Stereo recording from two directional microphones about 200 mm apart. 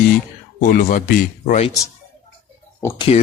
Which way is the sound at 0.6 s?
45° left (ahead or behind).